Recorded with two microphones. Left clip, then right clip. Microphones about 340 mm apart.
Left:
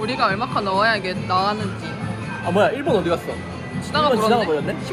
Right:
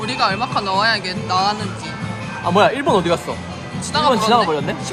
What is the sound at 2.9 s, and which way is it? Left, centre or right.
Speech, right.